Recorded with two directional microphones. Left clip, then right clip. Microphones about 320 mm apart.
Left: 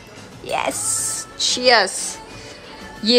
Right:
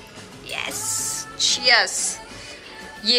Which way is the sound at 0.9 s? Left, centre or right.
Left.